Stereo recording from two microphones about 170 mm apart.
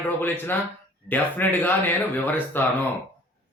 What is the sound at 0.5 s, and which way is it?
Speech, 10° left (ahead or behind).